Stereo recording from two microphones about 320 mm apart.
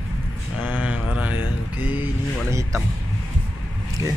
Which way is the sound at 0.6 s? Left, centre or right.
Centre.